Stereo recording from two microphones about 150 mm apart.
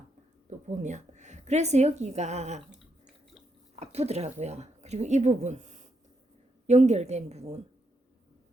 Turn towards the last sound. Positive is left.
turn(degrees=-45)  # may be behind; listen again after turning